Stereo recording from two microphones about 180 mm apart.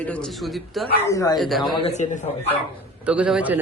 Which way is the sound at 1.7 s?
35° left (ahead or behind).